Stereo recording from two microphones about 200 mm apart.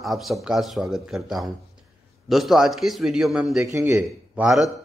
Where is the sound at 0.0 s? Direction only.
Centre (ahead or behind).